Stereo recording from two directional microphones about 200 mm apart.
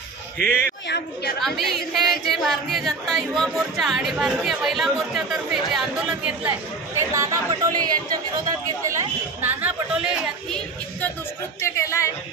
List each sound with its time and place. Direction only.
0.4 s a man's voice: 45° right (ahead or behind)
0.8 s a woman's voice: 55° left (ahead or behind)
1.4 s speech: centre (ahead or behind)
11.6 s a sound: 15° left (ahead or behind)